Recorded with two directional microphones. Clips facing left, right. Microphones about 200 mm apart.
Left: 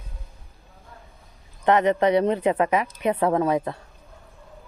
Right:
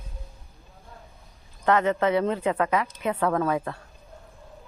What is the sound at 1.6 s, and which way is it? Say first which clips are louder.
A woman's voice: left 3 dB; 20° left (ahead or behind).